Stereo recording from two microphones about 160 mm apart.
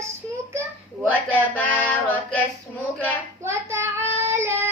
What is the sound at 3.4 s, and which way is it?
Child singing, 15° right (ahead or behind).